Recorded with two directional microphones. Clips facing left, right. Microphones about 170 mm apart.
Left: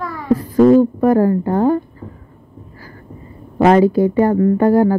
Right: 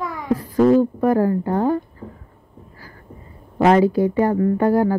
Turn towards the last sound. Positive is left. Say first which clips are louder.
# left 4 dB
turn(degrees=50)  # may be behind; listen again after turning